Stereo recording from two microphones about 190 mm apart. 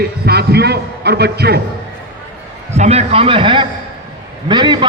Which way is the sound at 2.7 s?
35° right (ahead or behind).